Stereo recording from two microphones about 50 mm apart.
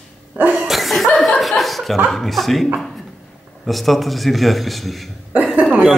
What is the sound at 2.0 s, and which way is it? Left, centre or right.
Speech, centre.